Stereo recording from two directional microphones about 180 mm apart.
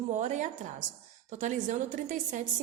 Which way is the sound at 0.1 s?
40° right (ahead or behind).